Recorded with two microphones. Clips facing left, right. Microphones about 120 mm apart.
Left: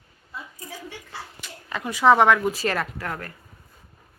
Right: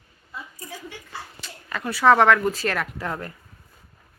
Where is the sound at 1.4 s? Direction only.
15° left (ahead or behind).